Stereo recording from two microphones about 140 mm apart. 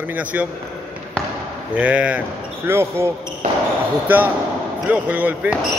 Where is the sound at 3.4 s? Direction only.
60° right (ahead or behind).